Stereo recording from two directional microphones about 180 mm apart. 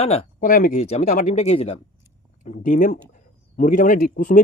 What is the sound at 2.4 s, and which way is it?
Speech, 45° left (ahead or behind).